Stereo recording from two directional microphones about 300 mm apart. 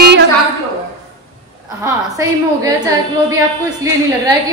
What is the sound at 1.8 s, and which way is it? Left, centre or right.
Speech, centre.